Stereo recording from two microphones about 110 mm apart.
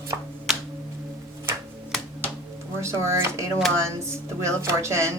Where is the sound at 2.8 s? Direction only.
25° right (ahead or behind).